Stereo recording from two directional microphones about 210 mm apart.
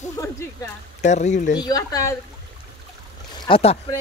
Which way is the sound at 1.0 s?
35° left (ahead or behind).